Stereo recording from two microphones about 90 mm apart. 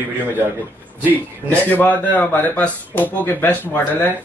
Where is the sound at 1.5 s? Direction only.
20° left (ahead or behind).